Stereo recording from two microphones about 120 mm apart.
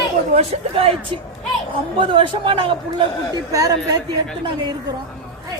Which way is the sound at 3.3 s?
30° right (ahead or behind).